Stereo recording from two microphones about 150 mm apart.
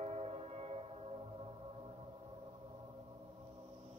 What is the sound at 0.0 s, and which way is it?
Music, 45° right (ahead or behind).